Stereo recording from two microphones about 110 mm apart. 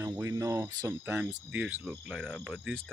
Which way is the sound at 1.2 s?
15° right (ahead or behind).